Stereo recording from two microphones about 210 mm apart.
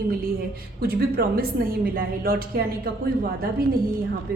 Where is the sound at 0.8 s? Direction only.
45° right (ahead or behind).